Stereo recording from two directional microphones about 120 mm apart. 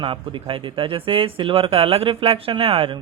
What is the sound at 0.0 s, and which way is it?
Speech, 45° right (ahead or behind).